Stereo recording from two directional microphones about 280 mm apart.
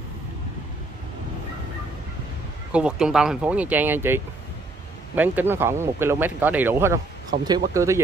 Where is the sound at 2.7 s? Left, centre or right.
Centre.